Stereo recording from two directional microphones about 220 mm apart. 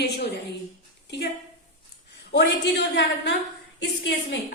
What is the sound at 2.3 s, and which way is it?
A woman's voice, 50° left (ahead or behind).